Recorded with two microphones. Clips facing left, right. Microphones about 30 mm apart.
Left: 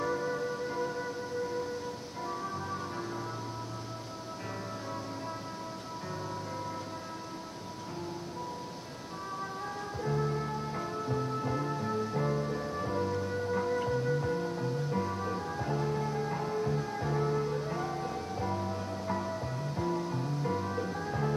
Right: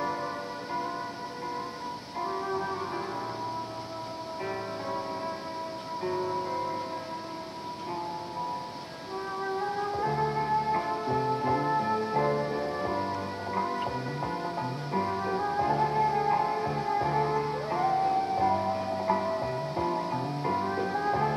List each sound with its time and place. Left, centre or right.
0.0 s music: right
2.2 s music: right
6.0 s music: right
9.6 s music: right